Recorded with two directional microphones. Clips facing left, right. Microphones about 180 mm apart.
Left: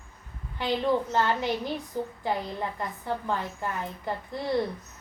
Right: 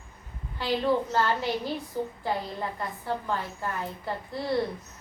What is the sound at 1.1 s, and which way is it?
A woman's voice, 20° left (ahead or behind).